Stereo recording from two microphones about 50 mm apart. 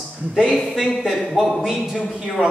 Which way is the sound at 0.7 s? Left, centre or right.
Centre.